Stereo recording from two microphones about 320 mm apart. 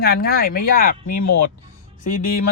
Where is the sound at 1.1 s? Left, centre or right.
Left.